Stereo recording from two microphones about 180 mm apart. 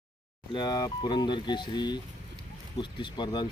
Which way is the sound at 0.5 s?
25° left (ahead or behind).